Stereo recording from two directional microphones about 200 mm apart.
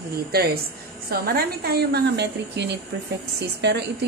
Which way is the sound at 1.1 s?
50° right (ahead or behind).